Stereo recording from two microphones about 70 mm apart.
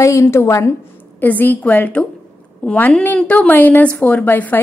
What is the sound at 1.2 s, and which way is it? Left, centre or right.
A woman's voice, left.